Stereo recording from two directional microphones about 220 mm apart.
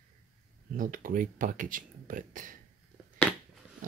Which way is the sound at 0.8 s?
40° right (ahead or behind).